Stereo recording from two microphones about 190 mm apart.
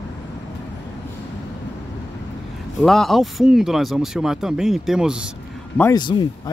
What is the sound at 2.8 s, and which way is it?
Speech, centre (ahead or behind).